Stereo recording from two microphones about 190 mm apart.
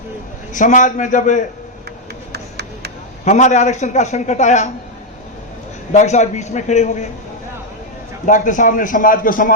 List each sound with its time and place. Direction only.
0.5 s a man's voice: 40° left (ahead or behind)
2.3 s a sound: 60° right (ahead or behind)
3.2 s a man's voice: 40° left (ahead or behind)
5.9 s a man's voice: 40° left (ahead or behind)
8.3 s speech: 45° left (ahead or behind)